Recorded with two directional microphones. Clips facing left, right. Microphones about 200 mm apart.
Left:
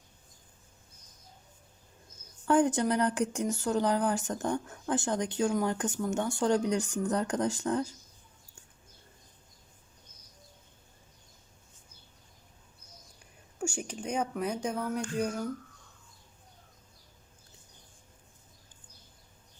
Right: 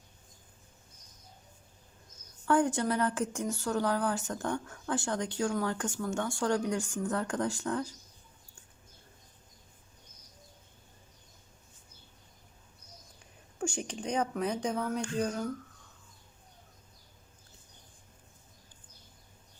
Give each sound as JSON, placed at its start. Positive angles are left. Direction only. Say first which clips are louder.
{"t": 2.5, "sound": "a woman's voice", "louder": "left 2 dB", "side_deg": 20}
{"t": 13.6, "sound": "speech", "louder": "even", "side_deg": 10}